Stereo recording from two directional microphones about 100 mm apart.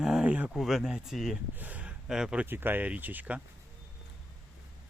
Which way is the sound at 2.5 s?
20° right (ahead or behind).